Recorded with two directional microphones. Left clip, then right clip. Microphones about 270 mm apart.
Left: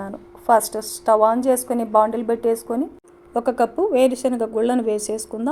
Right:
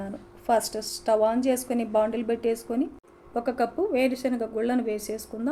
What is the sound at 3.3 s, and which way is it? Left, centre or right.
A woman's voice, left.